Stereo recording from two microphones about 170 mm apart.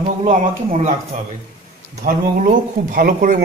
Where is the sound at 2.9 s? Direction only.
55° right (ahead or behind).